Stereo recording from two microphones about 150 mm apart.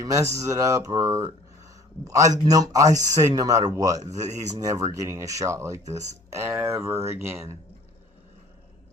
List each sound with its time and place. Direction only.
0.1 s speech: 20° right (ahead or behind)